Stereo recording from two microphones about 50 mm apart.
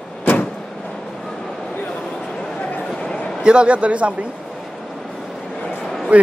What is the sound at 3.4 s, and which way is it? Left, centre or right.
Speech, right.